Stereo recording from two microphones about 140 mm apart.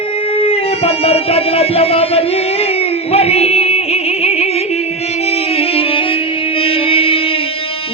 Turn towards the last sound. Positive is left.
turn(degrees=40)  # may be behind; listen again after turning